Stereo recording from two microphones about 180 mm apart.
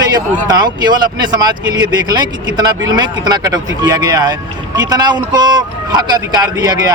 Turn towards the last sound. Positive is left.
turn(degrees=-25)  # may be behind; listen again after turning